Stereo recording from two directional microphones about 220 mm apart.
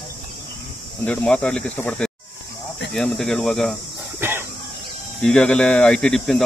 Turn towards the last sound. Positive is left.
turn(degrees=0)  # may be behind; listen again after turning